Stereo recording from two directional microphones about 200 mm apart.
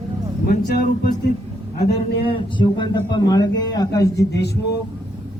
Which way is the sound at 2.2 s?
25° left (ahead or behind).